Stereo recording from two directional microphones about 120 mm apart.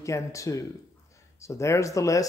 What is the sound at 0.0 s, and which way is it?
Speech, 25° left (ahead or behind).